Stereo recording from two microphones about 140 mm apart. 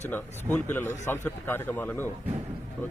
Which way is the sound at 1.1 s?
15° left (ahead or behind).